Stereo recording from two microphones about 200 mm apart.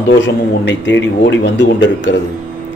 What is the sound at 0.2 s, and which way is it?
Speech, 60° left (ahead or behind).